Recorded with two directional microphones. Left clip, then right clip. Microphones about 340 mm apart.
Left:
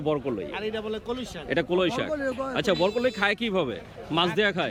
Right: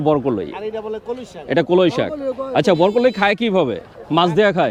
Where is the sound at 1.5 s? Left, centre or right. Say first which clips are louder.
Right 10 dB; right.